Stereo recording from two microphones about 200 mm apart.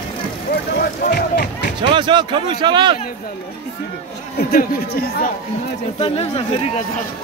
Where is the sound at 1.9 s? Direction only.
20° right (ahead or behind).